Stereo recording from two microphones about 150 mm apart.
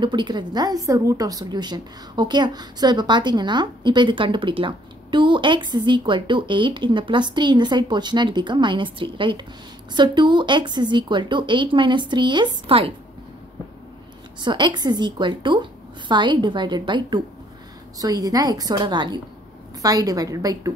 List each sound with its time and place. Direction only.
0.0 s a woman's voice: 30° right (ahead or behind)
14.4 s a woman's voice: 30° right (ahead or behind)